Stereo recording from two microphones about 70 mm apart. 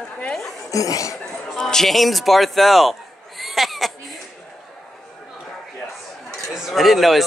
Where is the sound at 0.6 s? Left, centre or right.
Left.